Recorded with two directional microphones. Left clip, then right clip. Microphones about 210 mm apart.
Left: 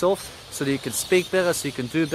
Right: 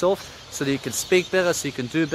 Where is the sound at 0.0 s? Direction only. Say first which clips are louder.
Even; centre (ahead or behind).